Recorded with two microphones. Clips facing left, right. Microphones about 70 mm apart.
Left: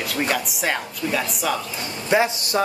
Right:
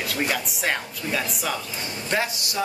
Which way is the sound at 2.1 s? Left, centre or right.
Centre.